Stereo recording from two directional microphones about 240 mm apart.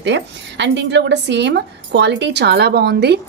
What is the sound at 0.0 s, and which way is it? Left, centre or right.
Speech, right.